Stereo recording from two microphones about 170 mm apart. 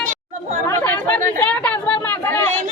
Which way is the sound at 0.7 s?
10° left (ahead or behind).